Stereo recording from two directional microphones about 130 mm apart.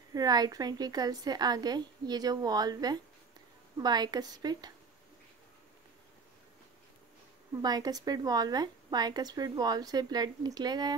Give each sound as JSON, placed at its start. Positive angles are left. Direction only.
{"t": 0.1, "sound": "a woman's voice", "side_deg": -30}
{"t": 7.6, "sound": "a woman's voice", "side_deg": -30}